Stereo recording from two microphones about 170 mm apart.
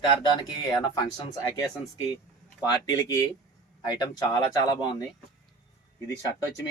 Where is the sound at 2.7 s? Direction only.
20° left (ahead or behind).